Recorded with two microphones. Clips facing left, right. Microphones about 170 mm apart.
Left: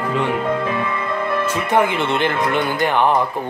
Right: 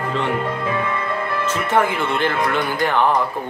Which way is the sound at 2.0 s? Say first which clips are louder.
Left 1 dB; 20° left (ahead or behind).